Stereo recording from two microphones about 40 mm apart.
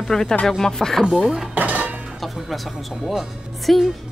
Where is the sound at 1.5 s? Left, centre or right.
Right.